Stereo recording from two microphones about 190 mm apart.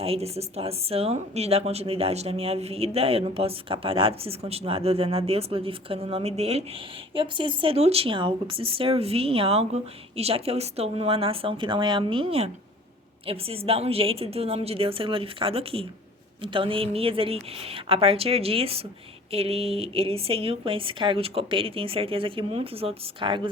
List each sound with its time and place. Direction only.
0.0 s speech: 30° right (ahead or behind)